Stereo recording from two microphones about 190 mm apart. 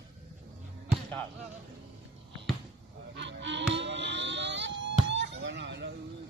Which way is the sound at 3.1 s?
70° right (ahead or behind).